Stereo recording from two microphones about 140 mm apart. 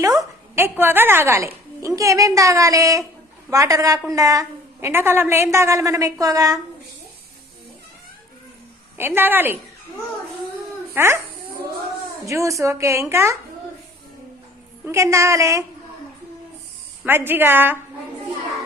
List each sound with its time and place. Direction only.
0.0 s a woman's voice: 20° right (ahead or behind)
9.0 s a woman's voice: 15° right (ahead or behind)
10.9 s a woman's voice: 15° right (ahead or behind)
12.2 s a woman's voice: 20° right (ahead or behind)
14.8 s a woman's voice: 20° right (ahead or behind)
17.1 s a woman's voice: 15° right (ahead or behind)